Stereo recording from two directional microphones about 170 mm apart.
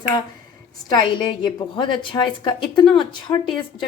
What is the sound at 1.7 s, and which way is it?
Speech, 30° left (ahead or behind).